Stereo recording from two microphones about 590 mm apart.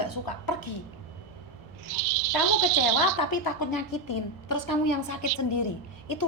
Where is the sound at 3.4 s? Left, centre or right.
Left.